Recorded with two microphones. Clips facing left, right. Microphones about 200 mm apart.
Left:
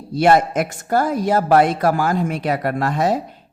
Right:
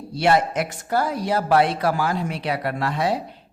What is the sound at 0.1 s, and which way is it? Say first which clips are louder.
A woman's voice: left 5 dB; 50° left (ahead or behind).